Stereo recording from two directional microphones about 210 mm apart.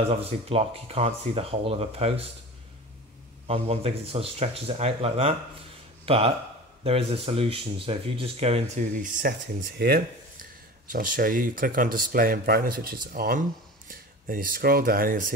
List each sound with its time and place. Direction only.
0.1 s speech: 30° right (ahead or behind)
3.4 s speech: 30° right (ahead or behind)